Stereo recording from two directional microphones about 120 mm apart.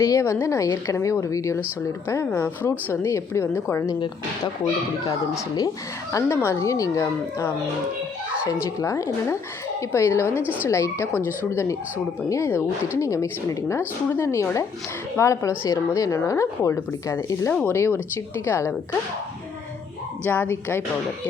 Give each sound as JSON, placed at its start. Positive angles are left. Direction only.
{"t": 0.0, "sound": "a woman's voice", "side_deg": 25}
{"t": 5.0, "sound": "a woman's voice", "side_deg": 30}
{"t": 8.8, "sound": "a woman's voice", "side_deg": 25}
{"t": 11.1, "sound": "speech", "side_deg": -15}
{"t": 11.5, "sound": "a woman's voice", "side_deg": 25}
{"t": 20.2, "sound": "speech", "side_deg": 15}